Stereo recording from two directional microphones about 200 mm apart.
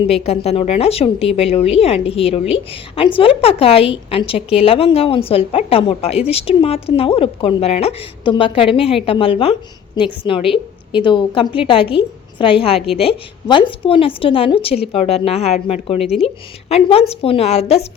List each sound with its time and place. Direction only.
0.1 s a woman's voice: 30° left (ahead or behind)